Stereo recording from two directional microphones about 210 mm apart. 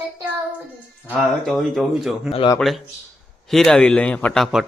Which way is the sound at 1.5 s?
Centre (ahead or behind).